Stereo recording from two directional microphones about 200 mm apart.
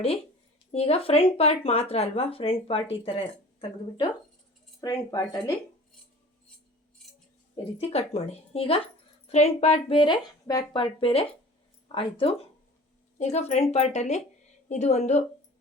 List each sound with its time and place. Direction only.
0.7 s speech: 30° left (ahead or behind)
7.5 s a woman's voice: 30° left (ahead or behind)